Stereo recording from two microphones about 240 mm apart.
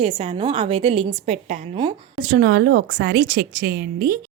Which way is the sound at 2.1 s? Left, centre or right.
Right.